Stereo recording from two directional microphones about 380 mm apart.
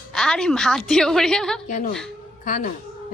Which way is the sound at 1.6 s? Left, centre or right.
Centre.